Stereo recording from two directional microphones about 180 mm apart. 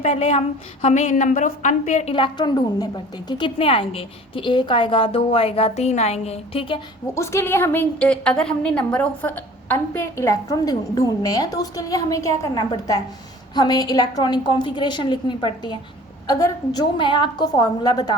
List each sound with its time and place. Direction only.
0.0 s a woman's voice: 35° left (ahead or behind)
2.1 s a woman's voice: 25° left (ahead or behind)
7.1 s a woman's voice: 15° left (ahead or behind)